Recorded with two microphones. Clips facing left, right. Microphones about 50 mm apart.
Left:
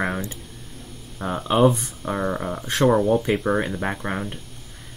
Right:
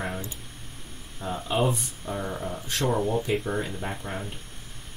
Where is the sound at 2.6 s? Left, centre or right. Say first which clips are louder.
Left 9 dB; left.